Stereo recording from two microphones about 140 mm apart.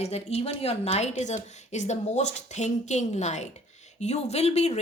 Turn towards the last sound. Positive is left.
turn(degrees=50)  # may be behind; listen again after turning